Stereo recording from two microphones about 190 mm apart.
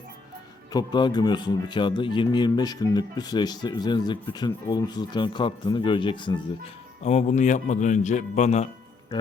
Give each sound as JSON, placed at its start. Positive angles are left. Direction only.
{"t": 0.7, "sound": "a man's voice", "side_deg": 20}
{"t": 7.0, "sound": "speech", "side_deg": 35}